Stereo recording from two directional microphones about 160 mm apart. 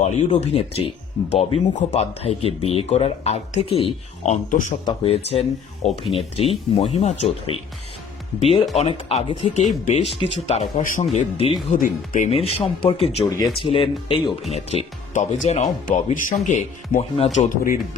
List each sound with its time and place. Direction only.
0.0 s speech: 40° left (ahead or behind)
4.9 s speech: 40° left (ahead or behind)
8.7 s speech: 35° left (ahead or behind)
10.8 s speech: 55° left (ahead or behind)
12.3 s speech: 40° left (ahead or behind)
13.2 s speech: 20° left (ahead or behind)
13.6 s speech: 35° left (ahead or behind)